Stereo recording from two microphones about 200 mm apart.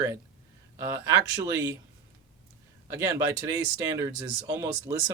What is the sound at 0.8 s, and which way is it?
Speech, 15° right (ahead or behind).